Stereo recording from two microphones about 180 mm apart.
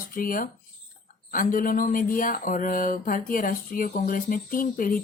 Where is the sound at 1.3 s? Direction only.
50° left (ahead or behind).